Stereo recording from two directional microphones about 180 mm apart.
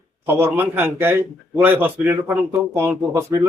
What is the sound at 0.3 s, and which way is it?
Speech, 10° right (ahead or behind).